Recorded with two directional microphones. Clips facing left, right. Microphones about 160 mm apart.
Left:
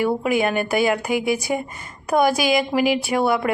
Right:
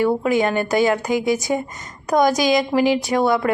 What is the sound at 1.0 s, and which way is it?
Speech, 35° right (ahead or behind).